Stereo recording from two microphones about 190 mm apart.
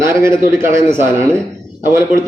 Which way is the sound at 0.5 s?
15° right (ahead or behind).